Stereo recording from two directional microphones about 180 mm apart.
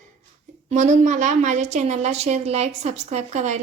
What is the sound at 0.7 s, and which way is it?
A woman's voice, 45° right (ahead or behind).